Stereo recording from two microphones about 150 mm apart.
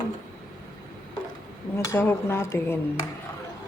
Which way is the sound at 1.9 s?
15° left (ahead or behind).